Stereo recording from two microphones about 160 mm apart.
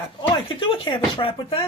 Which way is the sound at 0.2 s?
30° left (ahead or behind).